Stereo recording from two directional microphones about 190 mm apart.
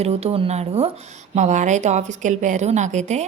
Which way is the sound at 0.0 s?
35° right (ahead or behind).